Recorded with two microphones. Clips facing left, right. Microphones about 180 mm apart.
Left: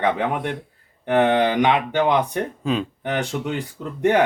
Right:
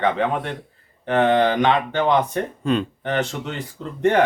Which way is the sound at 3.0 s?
10° left (ahead or behind).